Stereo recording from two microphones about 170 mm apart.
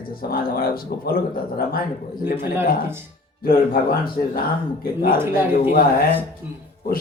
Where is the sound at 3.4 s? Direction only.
60° left (ahead or behind).